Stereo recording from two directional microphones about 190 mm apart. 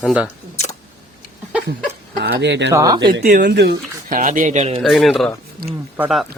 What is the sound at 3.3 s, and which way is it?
Speech, 55° right (ahead or behind).